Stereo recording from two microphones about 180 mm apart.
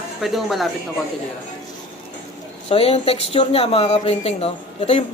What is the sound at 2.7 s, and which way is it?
Speech, 35° left (ahead or behind).